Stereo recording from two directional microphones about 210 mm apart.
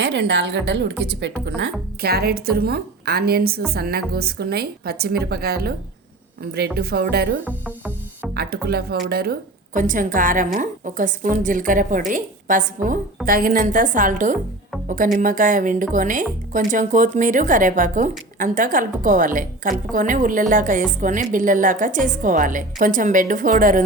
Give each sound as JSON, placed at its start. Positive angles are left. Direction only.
{"t": 0.0, "sound": "a woman's voice", "side_deg": -55}
{"t": 7.4, "sound": "music", "side_deg": -5}
{"t": 8.3, "sound": "a woman's voice", "side_deg": -50}